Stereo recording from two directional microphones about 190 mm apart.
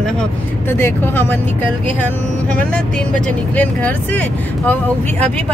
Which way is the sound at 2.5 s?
5° left (ahead or behind).